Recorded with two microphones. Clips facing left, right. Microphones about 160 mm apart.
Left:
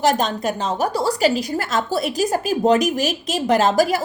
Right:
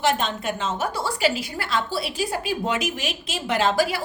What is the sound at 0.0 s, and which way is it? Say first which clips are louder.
A woman's voice: left 4 dB; 40° left (ahead or behind).